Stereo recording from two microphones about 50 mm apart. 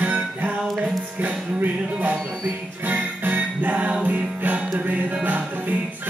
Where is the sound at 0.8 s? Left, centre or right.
Right.